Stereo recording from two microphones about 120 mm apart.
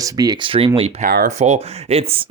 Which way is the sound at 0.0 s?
30° right (ahead or behind).